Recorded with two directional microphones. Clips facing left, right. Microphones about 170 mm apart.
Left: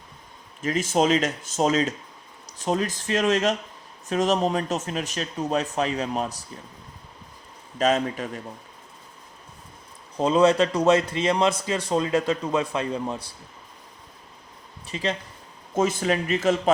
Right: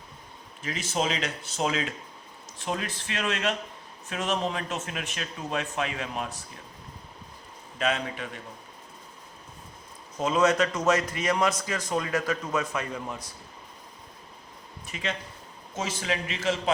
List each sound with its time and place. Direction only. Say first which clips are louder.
0.6 s speech: left 7 dB; 45° left (ahead or behind)
7.8 s speech: left 6 dB; 40° left (ahead or behind)
10.2 s a man's voice: left 5 dB; 35° left (ahead or behind)
14.8 s speech: left 6 dB; 35° left (ahead or behind)
15.7 s speech: left 8 dB; 50° left (ahead or behind)